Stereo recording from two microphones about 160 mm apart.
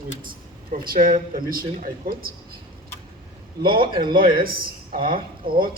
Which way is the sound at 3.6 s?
65° right (ahead or behind).